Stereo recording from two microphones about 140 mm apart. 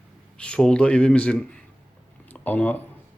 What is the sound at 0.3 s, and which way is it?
Speech, 5° left (ahead or behind).